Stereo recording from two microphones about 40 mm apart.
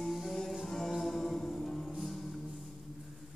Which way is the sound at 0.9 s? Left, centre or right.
Centre.